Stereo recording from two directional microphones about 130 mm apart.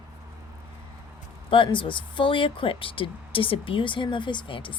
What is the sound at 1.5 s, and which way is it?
Speech, 40° left (ahead or behind).